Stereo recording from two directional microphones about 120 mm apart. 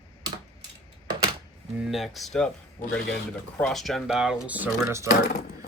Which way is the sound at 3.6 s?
Centre (ahead or behind).